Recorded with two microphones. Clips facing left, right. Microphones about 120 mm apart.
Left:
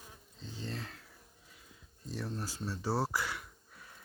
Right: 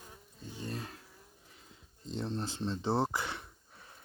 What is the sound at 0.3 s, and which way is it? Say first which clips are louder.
Bee: right 1 dB; 15° right (ahead or behind).